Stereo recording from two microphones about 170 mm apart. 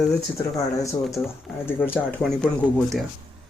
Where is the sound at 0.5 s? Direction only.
20° left (ahead or behind).